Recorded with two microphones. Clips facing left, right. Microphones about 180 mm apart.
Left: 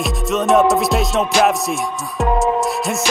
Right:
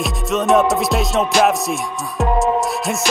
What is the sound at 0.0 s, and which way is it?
Music, centre (ahead or behind).